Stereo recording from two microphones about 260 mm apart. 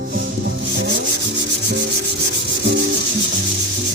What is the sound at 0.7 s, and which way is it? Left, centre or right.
Rub, right.